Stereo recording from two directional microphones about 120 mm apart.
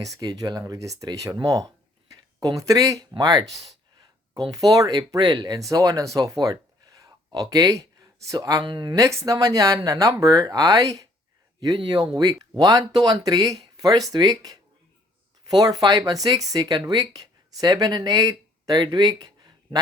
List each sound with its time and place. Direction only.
0.2 s speech: 35° right (ahead or behind)
1.5 s a sound: 30° right (ahead or behind)
4.5 s speech: 30° right (ahead or behind)
6.4 s a sound: 30° right (ahead or behind)
8.2 s speech: 30° right (ahead or behind)
9.0 s speech: 25° right (ahead or behind)